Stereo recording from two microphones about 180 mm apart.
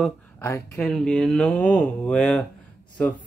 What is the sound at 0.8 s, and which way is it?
Speech, 5° left (ahead or behind).